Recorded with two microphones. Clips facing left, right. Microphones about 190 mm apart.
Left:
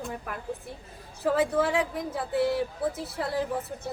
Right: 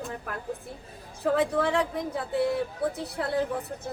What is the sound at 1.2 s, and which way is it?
A woman's voice, 5° left (ahead or behind).